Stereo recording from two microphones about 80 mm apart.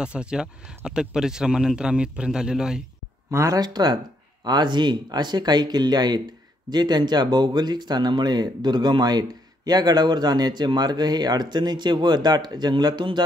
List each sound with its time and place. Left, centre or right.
0.0 s speech: centre
3.3 s speech: right
3.5 s speech: right